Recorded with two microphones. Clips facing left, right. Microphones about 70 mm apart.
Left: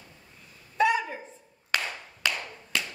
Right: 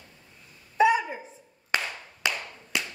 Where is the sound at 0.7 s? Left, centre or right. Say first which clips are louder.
Right 3 dB; centre.